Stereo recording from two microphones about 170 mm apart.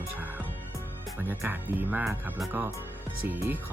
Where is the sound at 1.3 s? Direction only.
10° right (ahead or behind).